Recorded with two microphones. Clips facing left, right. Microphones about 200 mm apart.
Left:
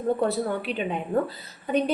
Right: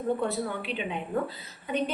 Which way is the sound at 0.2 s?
40° left (ahead or behind).